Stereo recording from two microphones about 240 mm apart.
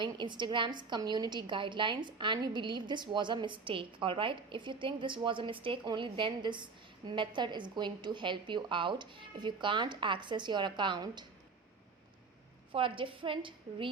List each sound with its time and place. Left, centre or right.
0.0 s a woman's voice: centre
12.7 s a woman's voice: right